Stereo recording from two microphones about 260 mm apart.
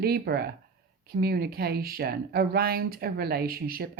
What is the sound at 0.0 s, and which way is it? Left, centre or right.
Speech, right.